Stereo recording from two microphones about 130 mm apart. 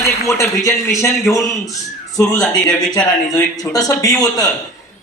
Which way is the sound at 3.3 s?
25° left (ahead or behind).